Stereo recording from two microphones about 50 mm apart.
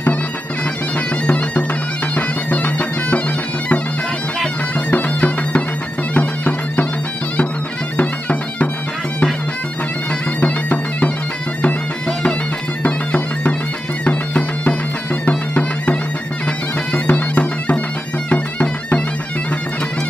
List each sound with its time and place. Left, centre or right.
1.2 s bagpipes: left
4.9 s bagpipes: left
8.0 s bagpipes: left
10.4 s bagpipes: left
12.8 s bagpipes: left
15.2 s music: left
16.9 s bagpipes: left